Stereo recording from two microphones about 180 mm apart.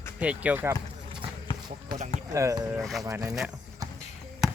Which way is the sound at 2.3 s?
15° right (ahead or behind).